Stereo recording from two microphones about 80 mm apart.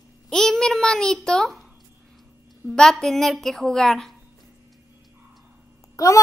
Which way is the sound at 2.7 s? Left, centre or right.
Centre.